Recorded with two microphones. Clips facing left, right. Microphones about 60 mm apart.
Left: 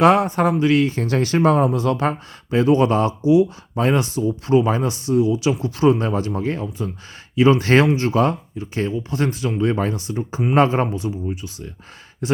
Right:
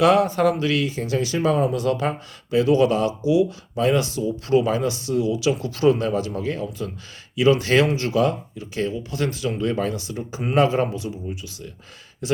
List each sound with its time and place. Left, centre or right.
0.0 s speech: left
0.9 s speech: left
1.7 s speech: left